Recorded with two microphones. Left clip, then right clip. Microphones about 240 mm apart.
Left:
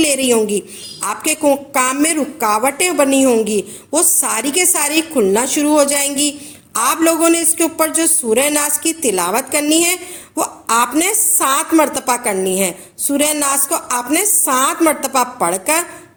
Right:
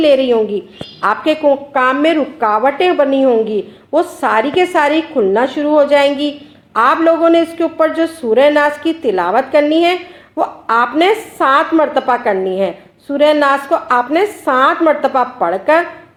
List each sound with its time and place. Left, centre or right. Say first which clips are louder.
0.0 s a woman's voice: right 4 dB; left